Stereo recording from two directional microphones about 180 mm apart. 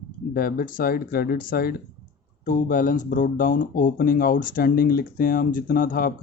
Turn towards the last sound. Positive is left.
turn(degrees=50)  # may be behind; listen again after turning